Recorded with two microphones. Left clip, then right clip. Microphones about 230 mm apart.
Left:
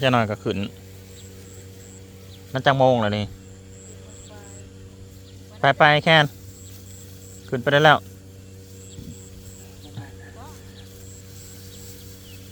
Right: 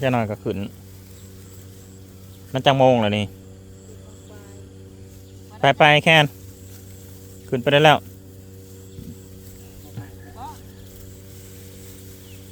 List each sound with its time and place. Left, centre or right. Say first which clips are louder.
0.0 s a man's voice: left 2 dB; centre
2.5 s a man's voice: right 2 dB; centre
5.5 s a man's voice: right 2 dB; right
7.5 s speech: right 1 dB; centre